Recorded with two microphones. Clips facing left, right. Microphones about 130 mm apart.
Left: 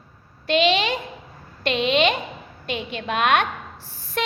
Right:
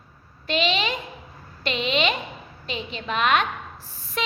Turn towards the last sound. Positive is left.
turn(degrees=55)  # may be behind; listen again after turning